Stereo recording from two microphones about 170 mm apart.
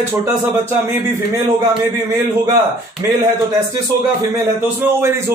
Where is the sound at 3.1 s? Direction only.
20° right (ahead or behind).